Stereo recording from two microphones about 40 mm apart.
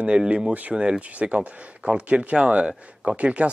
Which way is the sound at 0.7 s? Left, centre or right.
Right.